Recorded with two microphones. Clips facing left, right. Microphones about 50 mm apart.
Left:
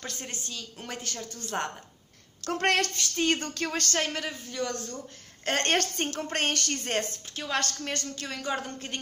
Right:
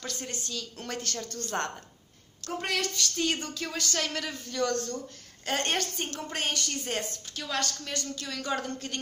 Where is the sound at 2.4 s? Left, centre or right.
Left.